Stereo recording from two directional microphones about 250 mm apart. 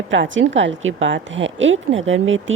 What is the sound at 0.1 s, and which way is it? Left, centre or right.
Speech, right.